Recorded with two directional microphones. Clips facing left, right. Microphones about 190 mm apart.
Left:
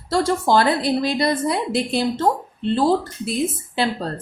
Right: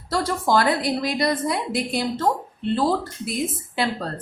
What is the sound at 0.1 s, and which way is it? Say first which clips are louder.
A woman's voice: left 3 dB; 25° left (ahead or behind).